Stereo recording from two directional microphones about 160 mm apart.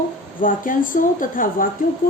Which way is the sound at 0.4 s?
60° left (ahead or behind).